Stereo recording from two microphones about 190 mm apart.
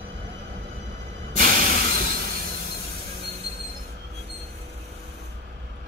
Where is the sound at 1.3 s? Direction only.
50° right (ahead or behind).